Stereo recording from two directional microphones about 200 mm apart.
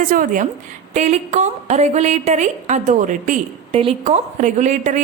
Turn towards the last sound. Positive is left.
turn(degrees=-40)  # may be behind; listen again after turning